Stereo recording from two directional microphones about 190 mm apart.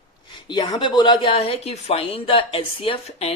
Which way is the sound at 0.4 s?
25° left (ahead or behind).